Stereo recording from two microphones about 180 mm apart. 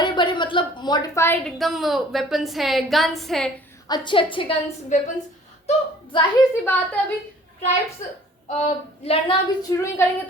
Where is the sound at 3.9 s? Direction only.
25° left (ahead or behind).